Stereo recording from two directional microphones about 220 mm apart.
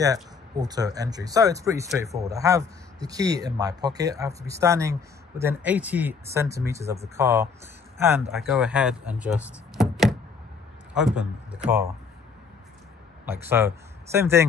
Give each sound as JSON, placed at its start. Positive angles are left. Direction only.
{"t": 0.0, "sound": "a man's voice", "side_deg": -15}
{"t": 8.3, "sound": "speech", "side_deg": 0}
{"t": 13.2, "sound": "speech", "side_deg": -10}